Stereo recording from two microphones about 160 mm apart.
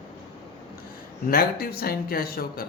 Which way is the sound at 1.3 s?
70° left (ahead or behind).